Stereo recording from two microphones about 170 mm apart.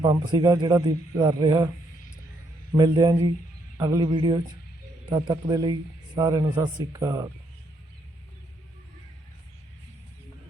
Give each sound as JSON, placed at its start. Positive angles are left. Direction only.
{"t": 0.0, "sound": "a man's voice", "side_deg": -25}
{"t": 2.7, "sound": "a man's voice", "side_deg": -25}